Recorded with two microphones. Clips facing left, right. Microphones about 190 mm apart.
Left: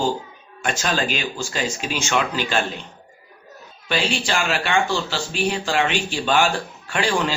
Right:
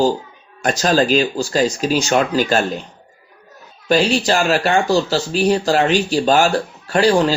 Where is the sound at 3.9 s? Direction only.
40° right (ahead or behind).